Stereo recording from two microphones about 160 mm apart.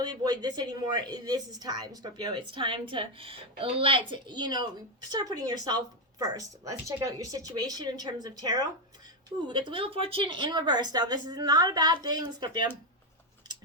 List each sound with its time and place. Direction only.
0.0 s a woman's voice: 25° right (ahead or behind)